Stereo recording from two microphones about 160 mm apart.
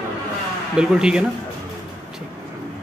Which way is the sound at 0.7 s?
5° right (ahead or behind).